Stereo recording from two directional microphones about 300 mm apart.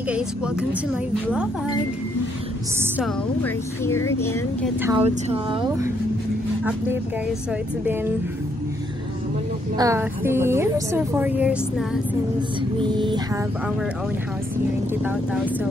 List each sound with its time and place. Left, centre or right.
3.4 s speech: centre
4.8 s a woman's voice: centre
9.8 s a woman's voice: centre
12.4 s a woman's voice: centre